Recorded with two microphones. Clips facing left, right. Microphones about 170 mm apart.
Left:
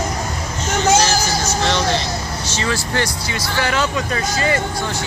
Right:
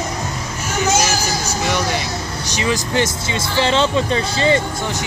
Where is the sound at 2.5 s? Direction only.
15° right (ahead or behind).